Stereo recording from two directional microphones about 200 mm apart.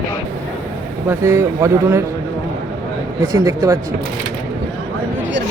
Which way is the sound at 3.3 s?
15° right (ahead or behind).